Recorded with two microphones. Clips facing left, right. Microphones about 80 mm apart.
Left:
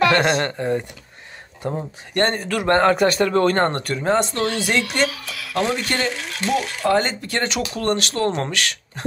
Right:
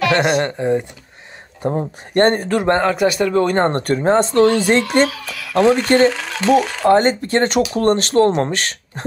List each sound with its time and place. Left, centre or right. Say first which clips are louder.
0.1 s speech: right 2 dB; centre
1.6 s speech: right 6 dB; right
2.8 s a man's voice: even; centre
3.7 s speech: right 5 dB; right